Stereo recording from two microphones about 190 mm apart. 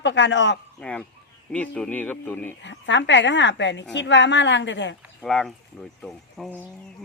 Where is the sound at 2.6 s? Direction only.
70° left (ahead or behind).